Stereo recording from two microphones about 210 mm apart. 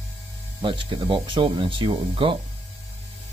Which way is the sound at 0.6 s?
25° right (ahead or behind).